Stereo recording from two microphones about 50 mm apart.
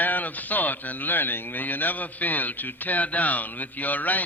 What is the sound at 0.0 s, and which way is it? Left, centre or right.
A man's voice, left.